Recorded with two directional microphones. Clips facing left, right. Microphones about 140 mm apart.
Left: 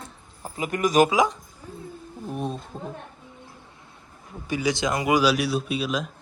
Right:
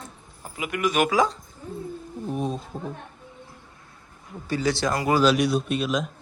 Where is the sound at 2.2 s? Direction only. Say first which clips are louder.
Right 2 dB; centre (ahead or behind).